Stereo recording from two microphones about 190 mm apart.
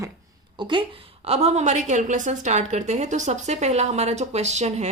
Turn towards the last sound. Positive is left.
turn(degrees=-35)  # may be behind; listen again after turning